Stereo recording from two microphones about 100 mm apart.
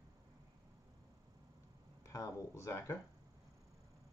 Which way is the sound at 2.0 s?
30° left (ahead or behind).